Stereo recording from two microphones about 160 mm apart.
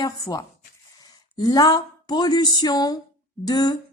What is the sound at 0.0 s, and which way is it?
Speech, 25° left (ahead or behind).